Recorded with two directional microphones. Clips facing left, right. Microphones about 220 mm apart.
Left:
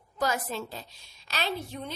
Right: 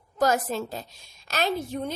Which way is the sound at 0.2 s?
45° right (ahead or behind).